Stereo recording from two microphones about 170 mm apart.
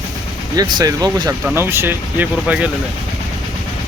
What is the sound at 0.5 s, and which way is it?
Speech, 20° right (ahead or behind).